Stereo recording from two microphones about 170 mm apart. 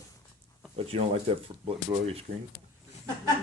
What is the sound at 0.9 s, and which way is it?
Speech, 35° right (ahead or behind).